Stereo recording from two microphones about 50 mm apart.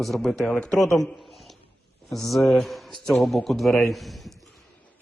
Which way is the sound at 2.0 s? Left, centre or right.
Centre.